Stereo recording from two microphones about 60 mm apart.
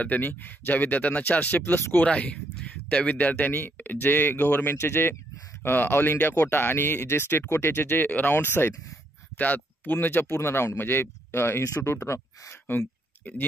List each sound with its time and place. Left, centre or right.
0.0 s speech: left
2.0 s speech: left
12.6 s a sound: left